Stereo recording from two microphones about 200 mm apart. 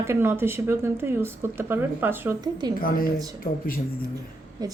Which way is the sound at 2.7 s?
45° left (ahead or behind).